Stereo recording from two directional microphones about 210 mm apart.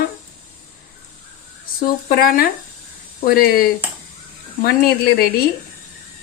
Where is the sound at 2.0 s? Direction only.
40° left (ahead or behind).